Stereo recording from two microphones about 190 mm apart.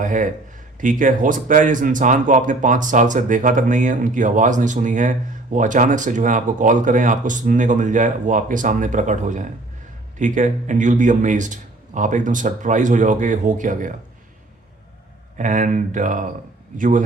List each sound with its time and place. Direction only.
0.0 s a man's voice: 45° right (ahead or behind)
15.4 s speech: 40° right (ahead or behind)